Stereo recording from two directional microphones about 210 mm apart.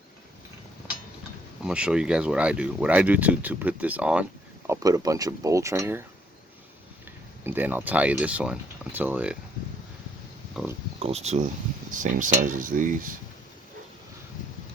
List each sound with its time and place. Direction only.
1.6 s speech: 5° right (ahead or behind)
7.4 s speech: 10° right (ahead or behind)
11.0 s cutlery: 30° right (ahead or behind)